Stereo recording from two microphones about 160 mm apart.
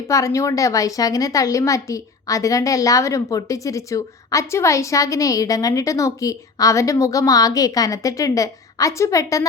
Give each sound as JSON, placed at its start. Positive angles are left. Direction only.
{"t": 0.1, "sound": "a woman's voice", "side_deg": 20}